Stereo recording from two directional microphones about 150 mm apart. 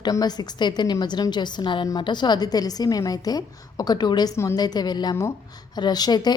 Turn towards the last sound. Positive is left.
turn(degrees=25)  # may be behind; listen again after turning